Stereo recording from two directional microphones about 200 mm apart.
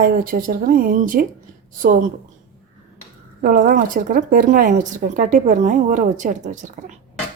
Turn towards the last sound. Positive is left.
turn(degrees=-40)  # may be behind; listen again after turning